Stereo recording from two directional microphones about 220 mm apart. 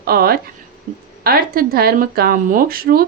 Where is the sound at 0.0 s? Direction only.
40° right (ahead or behind).